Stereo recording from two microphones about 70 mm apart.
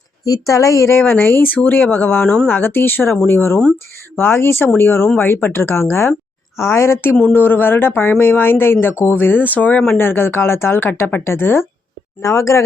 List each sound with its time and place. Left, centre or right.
0.3 s a woman's voice: left
1.1 s speech: left
2.2 s speech: centre
2.5 s speech: left
12.2 s a woman's voice: left